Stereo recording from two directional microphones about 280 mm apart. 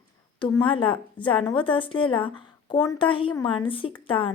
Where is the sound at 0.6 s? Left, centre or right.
Centre.